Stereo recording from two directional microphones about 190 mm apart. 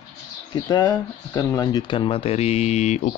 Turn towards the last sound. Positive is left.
turn(degrees=35)  # may be behind; listen again after turning